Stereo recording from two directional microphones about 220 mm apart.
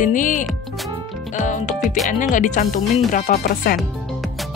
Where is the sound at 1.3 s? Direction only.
35° left (ahead or behind).